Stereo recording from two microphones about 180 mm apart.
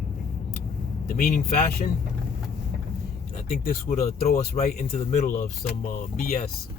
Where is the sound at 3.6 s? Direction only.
50° left (ahead or behind).